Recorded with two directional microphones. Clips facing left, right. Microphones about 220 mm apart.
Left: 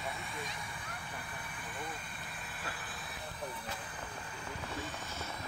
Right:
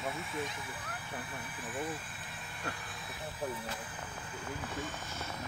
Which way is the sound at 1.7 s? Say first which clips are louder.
Right 6 dB; 5° right (ahead or behind).